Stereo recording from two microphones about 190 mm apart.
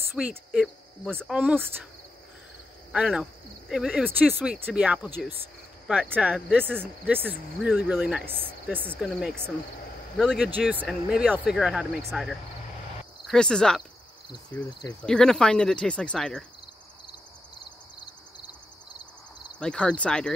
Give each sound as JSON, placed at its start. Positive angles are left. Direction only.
{"t": 0.1, "sound": "speech", "side_deg": -5}
{"t": 2.9, "sound": "speech", "side_deg": -5}
{"t": 8.9, "sound": "speech", "side_deg": 0}
{"t": 14.7, "sound": "speech", "side_deg": 20}
{"t": 15.0, "sound": "speech", "side_deg": 5}
{"t": 18.4, "sound": "a sound", "side_deg": 20}
{"t": 19.6, "sound": "speech", "side_deg": 5}